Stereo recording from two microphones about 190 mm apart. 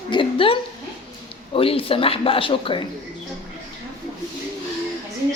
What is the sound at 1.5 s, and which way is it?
A man's voice, 30° left (ahead or behind).